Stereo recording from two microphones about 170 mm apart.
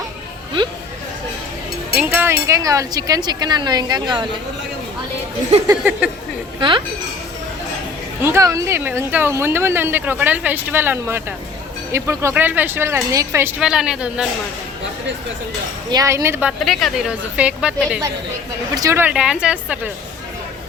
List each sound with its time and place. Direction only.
2.0 s speech: 10° right (ahead or behind); by 4.3 s 25° right (ahead or behind)
6.6 s speech: 30° right (ahead or behind)
8.2 s a woman's voice: 15° right (ahead or behind)
13.6 s a woman's voice: 5° right (ahead or behind)
15.9 s a woman's voice: 20° right (ahead or behind)
16.5 s a woman's voice: centre (ahead or behind)
18.7 s a woman's voice: 20° right (ahead or behind)